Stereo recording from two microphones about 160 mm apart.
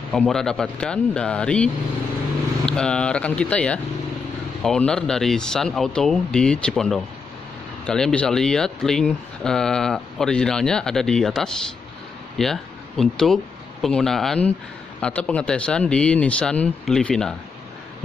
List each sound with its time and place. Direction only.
0.1 s speech: centre (ahead or behind)